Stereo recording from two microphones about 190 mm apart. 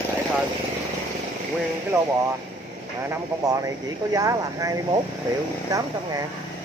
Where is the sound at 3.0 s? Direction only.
15° right (ahead or behind).